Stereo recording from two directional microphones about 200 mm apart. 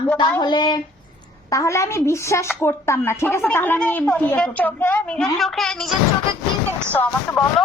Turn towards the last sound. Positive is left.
turn(degrees=10)  # may be behind; listen again after turning